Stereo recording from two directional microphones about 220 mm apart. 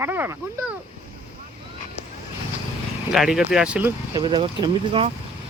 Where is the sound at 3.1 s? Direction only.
5° right (ahead or behind); by 5.0 s 20° right (ahead or behind).